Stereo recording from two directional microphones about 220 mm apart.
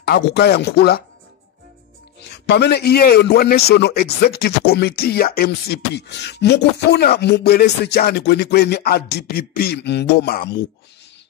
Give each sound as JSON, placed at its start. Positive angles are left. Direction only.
{"t": 0.0, "sound": "a man's voice", "side_deg": 50}
{"t": 2.3, "sound": "a man's voice", "side_deg": 50}